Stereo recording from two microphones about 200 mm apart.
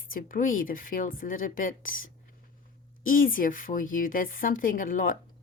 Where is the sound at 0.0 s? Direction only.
45° left (ahead or behind).